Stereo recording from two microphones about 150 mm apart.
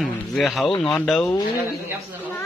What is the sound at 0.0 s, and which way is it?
Speech, centre (ahead or behind).